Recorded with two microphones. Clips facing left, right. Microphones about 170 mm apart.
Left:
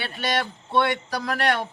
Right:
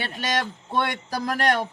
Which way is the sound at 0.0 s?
45° right (ahead or behind).